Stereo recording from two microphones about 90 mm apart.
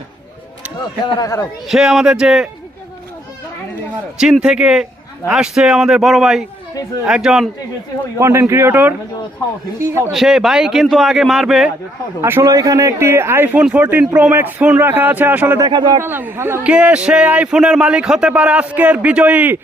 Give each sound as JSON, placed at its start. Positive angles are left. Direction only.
{"t": 1.2, "sound": "a man's voice", "side_deg": 40}
{"t": 1.6, "sound": "a man's voice", "side_deg": -5}
{"t": 4.2, "sound": "a man's voice", "side_deg": -5}
{"t": 8.2, "sound": "speech", "side_deg": -30}
{"t": 10.1, "sound": "a man's voice", "side_deg": -5}
{"t": 12.2, "sound": "speech", "side_deg": -25}
{"t": 12.5, "sound": "speech", "side_deg": -40}
{"t": 13.6, "sound": "speech", "side_deg": -15}
{"t": 15.6, "sound": "speech", "side_deg": -55}
{"t": 16.0, "sound": "speech", "side_deg": -25}
{"t": 16.6, "sound": "speech", "side_deg": -15}